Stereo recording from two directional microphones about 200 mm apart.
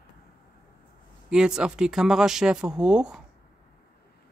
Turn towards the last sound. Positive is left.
turn(degrees=-5)  # may be behind; listen again after turning